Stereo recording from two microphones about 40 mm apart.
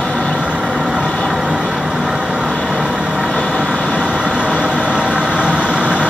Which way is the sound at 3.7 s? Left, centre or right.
Left.